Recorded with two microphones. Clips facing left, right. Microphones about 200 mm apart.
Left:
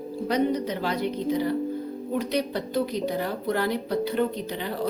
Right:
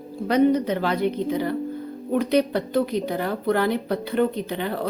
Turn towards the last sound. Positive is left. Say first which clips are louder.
# right 2 dB
turn(degrees=-55)  # may be behind; listen again after turning